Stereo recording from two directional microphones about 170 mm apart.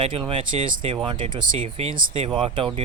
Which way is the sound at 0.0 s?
30° right (ahead or behind).